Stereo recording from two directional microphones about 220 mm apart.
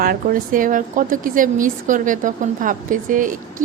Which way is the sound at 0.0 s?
40° right (ahead or behind).